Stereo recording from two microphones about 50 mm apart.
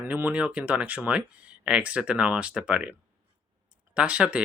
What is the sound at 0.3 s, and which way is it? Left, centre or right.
Speech, right.